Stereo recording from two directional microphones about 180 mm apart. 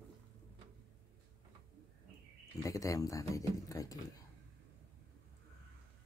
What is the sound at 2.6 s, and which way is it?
Speech, 20° left (ahead or behind).